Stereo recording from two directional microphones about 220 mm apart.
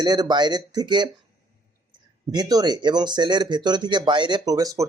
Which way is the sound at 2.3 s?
20° right (ahead or behind).